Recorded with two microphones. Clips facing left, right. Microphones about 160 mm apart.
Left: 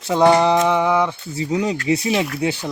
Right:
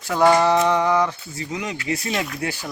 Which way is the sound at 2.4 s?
20° left (ahead or behind).